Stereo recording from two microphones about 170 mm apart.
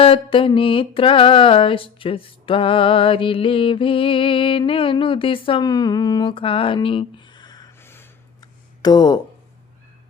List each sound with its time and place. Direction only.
0.0 s mantra: 30° left (ahead or behind)
7.8 s a sound: 15° left (ahead or behind)
8.8 s speech: 25° left (ahead or behind)